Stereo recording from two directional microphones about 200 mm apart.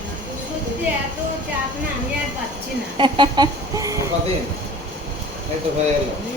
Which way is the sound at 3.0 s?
25° right (ahead or behind).